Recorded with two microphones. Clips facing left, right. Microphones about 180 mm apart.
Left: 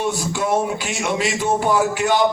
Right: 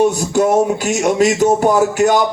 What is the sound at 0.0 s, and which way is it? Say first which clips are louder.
A man's voice: right 9 dB; 45° right (ahead or behind).